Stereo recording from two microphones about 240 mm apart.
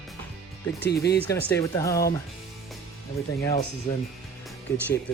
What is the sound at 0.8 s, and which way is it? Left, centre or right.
Speech, left.